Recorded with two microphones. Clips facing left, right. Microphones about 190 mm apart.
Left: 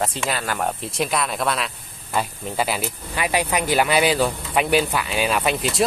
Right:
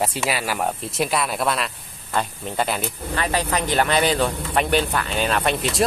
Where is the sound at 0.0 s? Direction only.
5° right (ahead or behind).